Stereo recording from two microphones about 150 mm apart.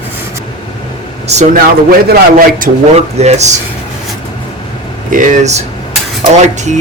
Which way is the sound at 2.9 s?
45° right (ahead or behind).